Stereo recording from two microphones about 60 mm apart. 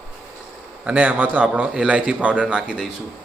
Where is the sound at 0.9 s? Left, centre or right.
Right.